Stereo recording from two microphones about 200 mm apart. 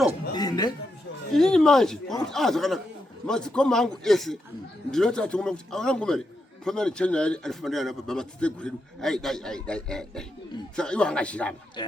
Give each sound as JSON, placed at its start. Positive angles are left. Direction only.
{"t": 0.3, "sound": "a sound", "side_deg": 20}
{"t": 1.3, "sound": "a man's voice", "side_deg": 5}
{"t": 11.8, "sound": "speech", "side_deg": 20}